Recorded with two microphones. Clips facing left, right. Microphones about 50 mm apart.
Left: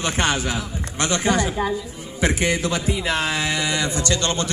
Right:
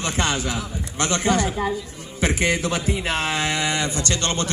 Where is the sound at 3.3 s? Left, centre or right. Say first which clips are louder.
Even; right.